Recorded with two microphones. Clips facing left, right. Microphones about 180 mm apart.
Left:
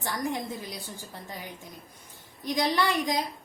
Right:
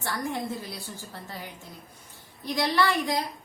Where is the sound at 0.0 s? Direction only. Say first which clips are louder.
Even; 15° left (ahead or behind).